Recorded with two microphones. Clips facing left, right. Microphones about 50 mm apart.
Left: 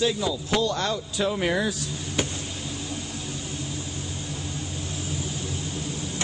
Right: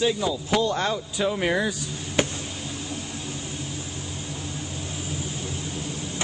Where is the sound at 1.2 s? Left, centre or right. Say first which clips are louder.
Right 1 dB; centre.